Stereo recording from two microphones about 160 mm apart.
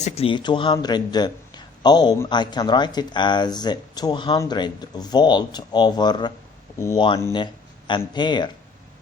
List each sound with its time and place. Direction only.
0.0 s a man's voice: 35° left (ahead or behind)